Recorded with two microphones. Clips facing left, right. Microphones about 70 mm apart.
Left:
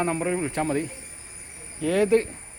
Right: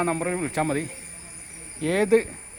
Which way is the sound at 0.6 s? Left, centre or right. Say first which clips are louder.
Even; right.